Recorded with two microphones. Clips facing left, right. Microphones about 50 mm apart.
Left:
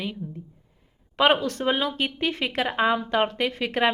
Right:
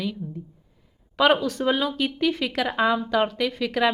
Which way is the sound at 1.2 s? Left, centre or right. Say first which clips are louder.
Right 1 dB; left.